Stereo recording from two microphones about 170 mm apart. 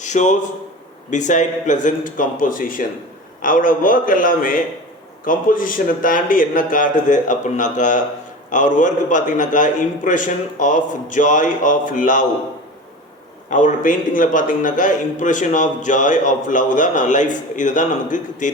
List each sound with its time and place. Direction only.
0.0 s a man's voice: 45° left (ahead or behind)
13.5 s a man's voice: 50° left (ahead or behind)